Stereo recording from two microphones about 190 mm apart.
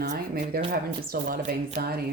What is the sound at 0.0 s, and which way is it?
Speech, 55° right (ahead or behind).